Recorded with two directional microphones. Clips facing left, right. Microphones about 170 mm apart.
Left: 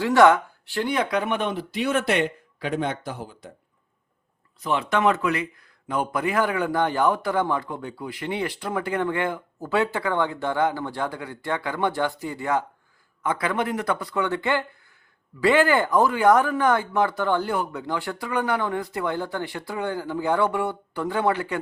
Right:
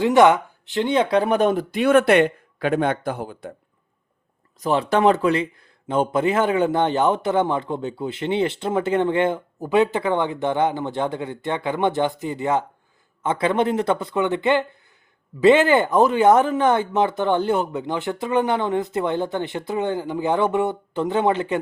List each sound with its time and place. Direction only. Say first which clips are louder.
0.0 s speech: right 2 dB; 20° right (ahead or behind); by 3.5 s 55° right (ahead or behind)
4.6 s a man's voice: right 4 dB; 35° right (ahead or behind)